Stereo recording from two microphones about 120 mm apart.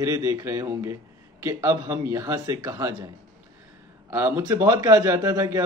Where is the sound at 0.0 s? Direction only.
30° right (ahead or behind).